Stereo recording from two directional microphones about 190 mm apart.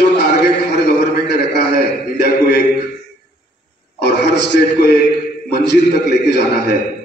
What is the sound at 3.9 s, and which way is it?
A man's voice, 60° left (ahead or behind).